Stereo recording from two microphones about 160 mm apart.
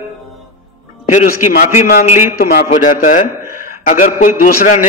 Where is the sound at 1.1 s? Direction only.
50° left (ahead or behind).